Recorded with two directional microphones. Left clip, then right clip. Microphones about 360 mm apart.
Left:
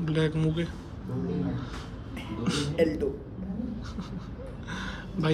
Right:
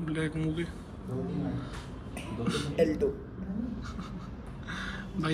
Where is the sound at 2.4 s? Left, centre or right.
Centre.